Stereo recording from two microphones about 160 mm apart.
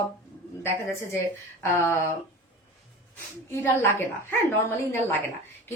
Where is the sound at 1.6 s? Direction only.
15° left (ahead or behind).